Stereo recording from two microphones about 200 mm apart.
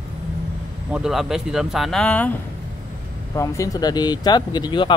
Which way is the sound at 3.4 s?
20° left (ahead or behind).